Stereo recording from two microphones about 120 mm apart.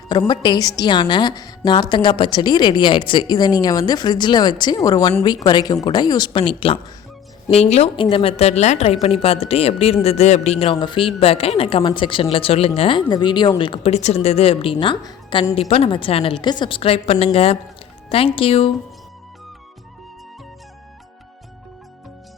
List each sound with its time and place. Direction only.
0.3 s a woman's voice: 35° left (ahead or behind)
7.5 s a woman's voice: 60° left (ahead or behind); by 13.5 s 40° left (ahead or behind)
13.6 s a woman's voice: 50° left (ahead or behind)
16.4 s a woman's voice: 40° left (ahead or behind)